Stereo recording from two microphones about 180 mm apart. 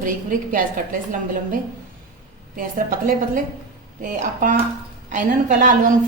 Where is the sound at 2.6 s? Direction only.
50° right (ahead or behind).